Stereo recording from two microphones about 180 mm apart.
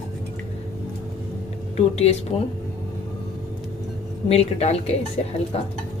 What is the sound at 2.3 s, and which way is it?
Speech, 35° left (ahead or behind).